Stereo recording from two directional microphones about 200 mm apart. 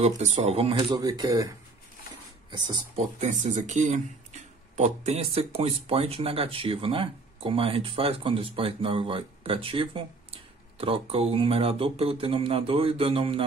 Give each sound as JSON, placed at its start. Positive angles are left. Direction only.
{"t": 0.0, "sound": "speech", "side_deg": -35}
{"t": 2.5, "sound": "speech", "side_deg": -20}
{"t": 3.3, "sound": "speech", "side_deg": -35}